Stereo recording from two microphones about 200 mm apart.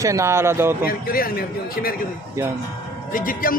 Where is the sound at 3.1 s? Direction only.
45° left (ahead or behind).